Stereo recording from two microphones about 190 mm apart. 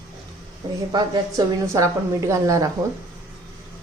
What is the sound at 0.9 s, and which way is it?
A woman's voice, 20° right (ahead or behind).